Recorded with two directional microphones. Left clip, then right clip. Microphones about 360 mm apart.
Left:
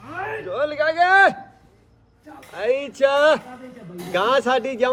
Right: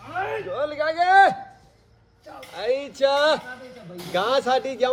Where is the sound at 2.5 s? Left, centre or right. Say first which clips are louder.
Left 3 dB; left.